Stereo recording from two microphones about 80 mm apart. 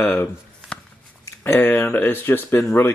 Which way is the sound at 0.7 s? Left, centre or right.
Centre.